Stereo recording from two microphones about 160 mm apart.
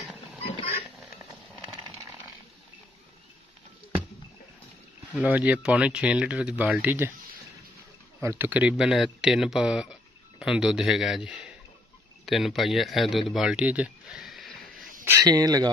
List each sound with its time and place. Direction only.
0.0 s a sound: centre (ahead or behind)
5.1 s speech: 10° right (ahead or behind)
8.2 s speech: 15° right (ahead or behind)
15.0 s speech: 20° right (ahead or behind)